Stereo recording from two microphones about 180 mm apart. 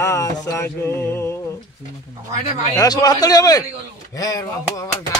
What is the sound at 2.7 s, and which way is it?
A man's voice, 20° left (ahead or behind).